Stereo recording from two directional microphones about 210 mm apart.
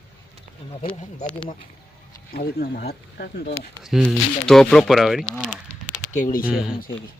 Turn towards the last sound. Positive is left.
turn(degrees=35)  # may be behind; listen again after turning